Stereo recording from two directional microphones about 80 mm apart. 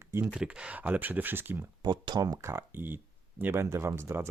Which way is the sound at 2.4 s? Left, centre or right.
Right.